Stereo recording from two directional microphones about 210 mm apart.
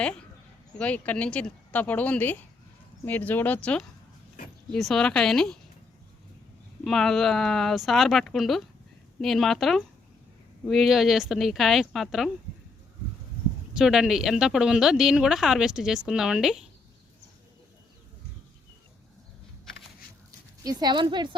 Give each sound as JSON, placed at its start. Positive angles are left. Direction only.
{"t": 0.8, "sound": "speech", "side_deg": 5}
{"t": 6.8, "sound": "speech", "side_deg": 0}
{"t": 13.7, "sound": "speech", "side_deg": 0}
{"t": 20.7, "sound": "speech", "side_deg": -20}